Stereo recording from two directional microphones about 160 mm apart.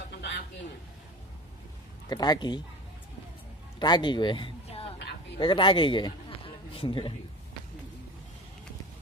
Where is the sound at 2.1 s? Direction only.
25° left (ahead or behind).